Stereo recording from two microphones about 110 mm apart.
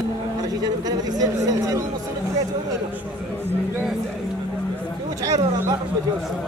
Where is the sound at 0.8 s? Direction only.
35° right (ahead or behind).